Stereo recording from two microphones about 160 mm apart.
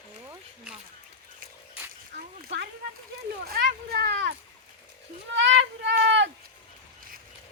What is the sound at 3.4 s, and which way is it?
Speech, 70° right (ahead or behind).